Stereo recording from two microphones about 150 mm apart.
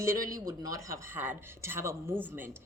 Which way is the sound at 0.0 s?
20° right (ahead or behind).